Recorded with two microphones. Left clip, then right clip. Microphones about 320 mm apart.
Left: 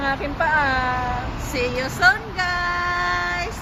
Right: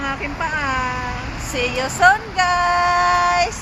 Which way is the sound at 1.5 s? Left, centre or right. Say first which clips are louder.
Right 3 dB; centre.